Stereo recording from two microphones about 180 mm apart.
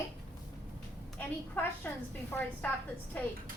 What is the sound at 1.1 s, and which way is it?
Speech, 10° left (ahead or behind).